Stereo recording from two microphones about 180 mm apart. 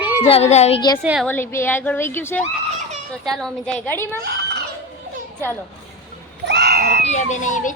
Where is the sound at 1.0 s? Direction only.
5° right (ahead or behind).